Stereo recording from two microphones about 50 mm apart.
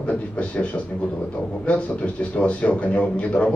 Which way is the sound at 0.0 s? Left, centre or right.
Left.